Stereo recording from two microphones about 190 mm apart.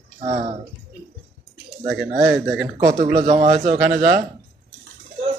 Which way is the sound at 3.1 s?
35° right (ahead or behind).